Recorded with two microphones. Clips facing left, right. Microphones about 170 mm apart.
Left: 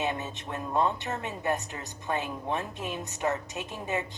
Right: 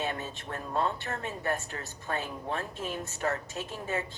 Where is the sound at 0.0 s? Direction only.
20° left (ahead or behind).